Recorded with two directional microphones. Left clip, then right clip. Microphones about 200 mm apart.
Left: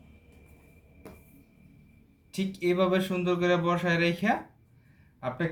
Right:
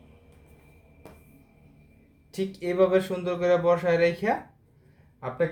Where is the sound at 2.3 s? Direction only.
25° right (ahead or behind).